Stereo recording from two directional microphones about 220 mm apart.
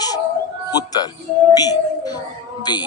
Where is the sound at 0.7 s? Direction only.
15° left (ahead or behind).